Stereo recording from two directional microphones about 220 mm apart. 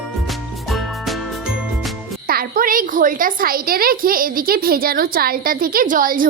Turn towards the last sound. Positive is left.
turn(degrees=-40)  # may be behind; listen again after turning